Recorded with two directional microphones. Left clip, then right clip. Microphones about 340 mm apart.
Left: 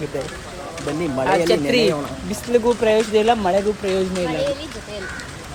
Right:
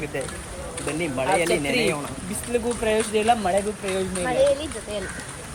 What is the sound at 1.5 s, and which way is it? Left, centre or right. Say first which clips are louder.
Speech: left 5 dB; centre.